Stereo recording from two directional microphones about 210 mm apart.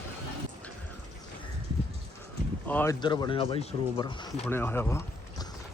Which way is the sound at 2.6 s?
10° left (ahead or behind).